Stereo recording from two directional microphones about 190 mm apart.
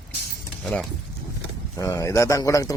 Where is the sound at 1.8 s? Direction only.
20° left (ahead or behind).